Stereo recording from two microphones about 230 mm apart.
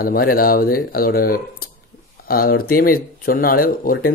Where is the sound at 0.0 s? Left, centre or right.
Left.